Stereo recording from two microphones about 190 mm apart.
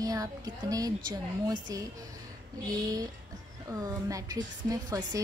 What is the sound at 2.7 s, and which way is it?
A woman's voice, 20° right (ahead or behind).